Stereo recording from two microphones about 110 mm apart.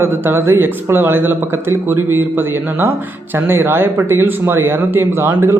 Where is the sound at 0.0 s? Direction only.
20° right (ahead or behind).